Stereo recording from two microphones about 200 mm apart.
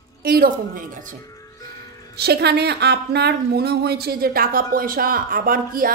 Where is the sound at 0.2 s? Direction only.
50° right (ahead or behind).